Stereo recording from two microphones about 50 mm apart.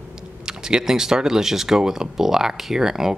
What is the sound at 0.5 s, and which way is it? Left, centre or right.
Speech, centre.